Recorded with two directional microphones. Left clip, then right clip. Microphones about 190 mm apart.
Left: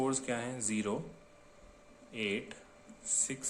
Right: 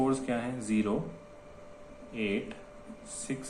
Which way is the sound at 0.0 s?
35° left (ahead or behind).